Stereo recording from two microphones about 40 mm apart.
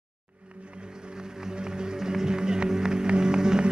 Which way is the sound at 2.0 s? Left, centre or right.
Centre.